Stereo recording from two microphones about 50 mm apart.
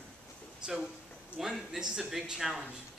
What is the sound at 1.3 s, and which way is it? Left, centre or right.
Speech, centre.